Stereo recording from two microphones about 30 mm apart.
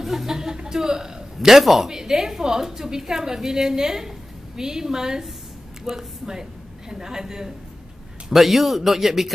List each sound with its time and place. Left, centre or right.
0.0 s a sound: centre
0.3 s a sound: right
0.7 s a man's voice: centre
1.6 s a woman's voice: centre
1.9 s a woman's voice: right
8.3 s a woman's voice: centre